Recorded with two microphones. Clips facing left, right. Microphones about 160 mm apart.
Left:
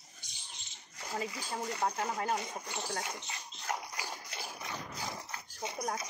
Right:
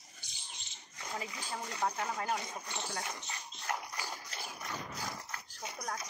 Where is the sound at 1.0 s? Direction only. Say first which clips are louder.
Left 3 dB; 5° left (ahead or behind).